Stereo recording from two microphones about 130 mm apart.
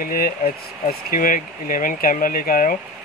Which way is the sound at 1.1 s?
90° left.